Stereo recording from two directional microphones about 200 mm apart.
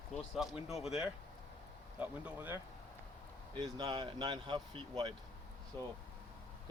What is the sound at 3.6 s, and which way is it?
Speech, 20° right (ahead or behind).